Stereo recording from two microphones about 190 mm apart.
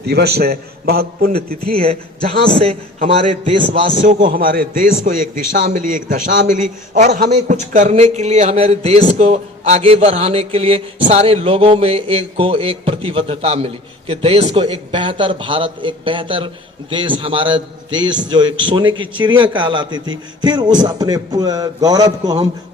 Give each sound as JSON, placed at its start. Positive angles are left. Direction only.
{"t": 0.1, "sound": "a man's voice", "side_deg": -55}
{"t": 1.8, "sound": "a man's voice", "side_deg": -30}
{"t": 4.0, "sound": "a man's voice", "side_deg": -45}